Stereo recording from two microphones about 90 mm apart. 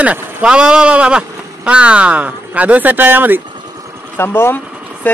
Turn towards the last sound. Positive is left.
turn(degrees=20)  # may be behind; listen again after turning